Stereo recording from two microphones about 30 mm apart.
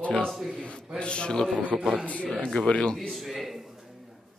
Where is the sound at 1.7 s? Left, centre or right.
Centre.